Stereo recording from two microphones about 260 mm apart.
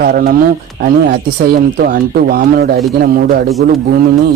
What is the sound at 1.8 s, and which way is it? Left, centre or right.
Speech, right.